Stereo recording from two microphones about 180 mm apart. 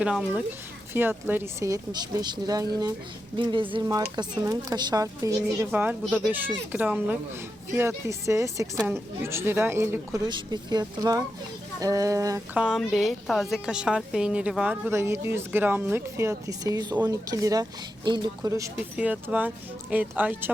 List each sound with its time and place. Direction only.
0.0 s a woman's voice: 5° right (ahead or behind)
6.1 s speech: 5° left (ahead or behind)
6.3 s a woman's voice: 10° right (ahead or behind)
12.5 s a woman's voice: 5° right (ahead or behind); by 18.7 s 20° right (ahead or behind)
18.9 s a woman's voice: 10° right (ahead or behind)